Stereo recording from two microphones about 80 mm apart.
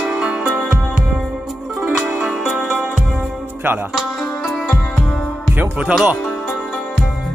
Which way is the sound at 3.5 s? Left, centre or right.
Right.